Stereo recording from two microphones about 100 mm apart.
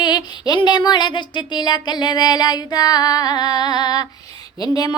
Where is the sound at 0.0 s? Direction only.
45° left (ahead or behind).